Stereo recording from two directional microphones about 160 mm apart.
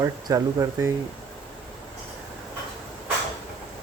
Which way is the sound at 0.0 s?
20° right (ahead or behind).